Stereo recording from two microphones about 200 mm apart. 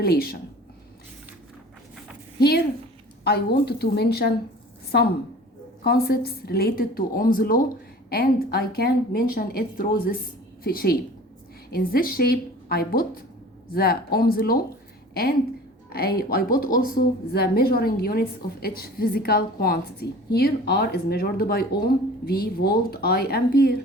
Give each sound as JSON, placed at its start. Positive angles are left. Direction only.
{"t": 0.0, "sound": "a woman's voice", "side_deg": 50}
{"t": 2.4, "sound": "a woman's voice", "side_deg": 50}